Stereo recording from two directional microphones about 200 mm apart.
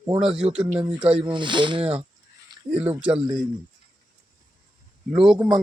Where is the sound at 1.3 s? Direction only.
25° right (ahead or behind).